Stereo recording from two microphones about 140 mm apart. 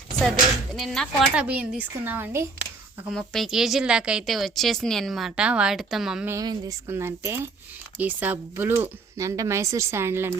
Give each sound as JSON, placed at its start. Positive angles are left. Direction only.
{"t": 0.2, "sound": "speech", "side_deg": 0}
{"t": 3.1, "sound": "speech", "side_deg": 0}
{"t": 6.4, "sound": "speech", "side_deg": -25}